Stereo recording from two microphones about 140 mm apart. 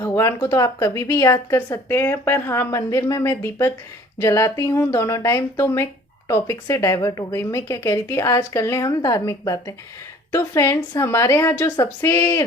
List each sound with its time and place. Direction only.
0.0 s a woman's voice: 20° left (ahead or behind)